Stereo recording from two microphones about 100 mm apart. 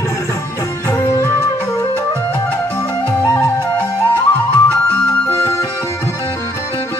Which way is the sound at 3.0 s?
20° left (ahead or behind).